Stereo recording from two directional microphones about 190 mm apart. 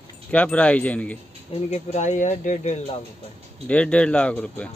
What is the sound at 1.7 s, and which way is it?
Speech, 35° left (ahead or behind).